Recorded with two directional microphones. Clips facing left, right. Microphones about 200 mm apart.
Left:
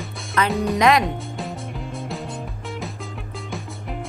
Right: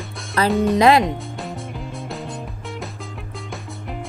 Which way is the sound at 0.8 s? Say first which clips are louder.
Right 3 dB; 30° right (ahead or behind).